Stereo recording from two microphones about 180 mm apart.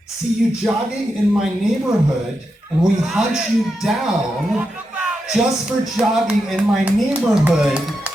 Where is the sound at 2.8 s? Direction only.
Centre (ahead or behind).